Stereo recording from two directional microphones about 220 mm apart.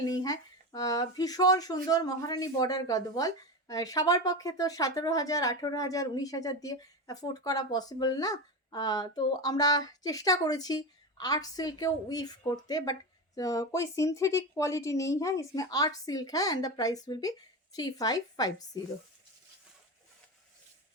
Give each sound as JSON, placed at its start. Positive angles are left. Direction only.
{"t": 0.0, "sound": "speech", "side_deg": 20}